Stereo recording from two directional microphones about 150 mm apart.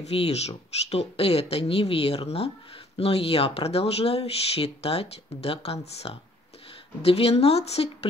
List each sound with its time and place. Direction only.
0.0 s speech: 45° left (ahead or behind)